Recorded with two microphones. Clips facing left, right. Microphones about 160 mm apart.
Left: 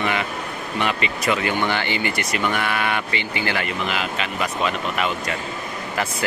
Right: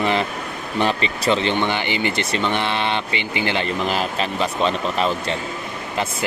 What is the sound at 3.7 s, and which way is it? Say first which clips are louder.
Speech: right 3 dB; 35° right (ahead or behind).